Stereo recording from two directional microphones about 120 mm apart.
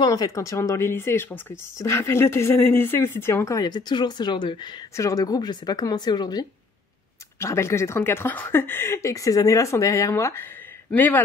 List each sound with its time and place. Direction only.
0.0 s speech: 30° left (ahead or behind)
3.6 s a woman's voice: 40° left (ahead or behind)
4.9 s a woman's voice: 25° left (ahead or behind)
7.3 s speech: 25° left (ahead or behind)